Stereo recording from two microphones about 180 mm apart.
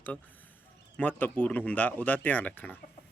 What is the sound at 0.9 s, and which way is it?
Speech, 10° left (ahead or behind).